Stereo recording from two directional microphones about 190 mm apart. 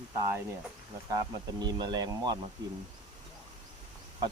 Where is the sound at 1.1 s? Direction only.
20° right (ahead or behind).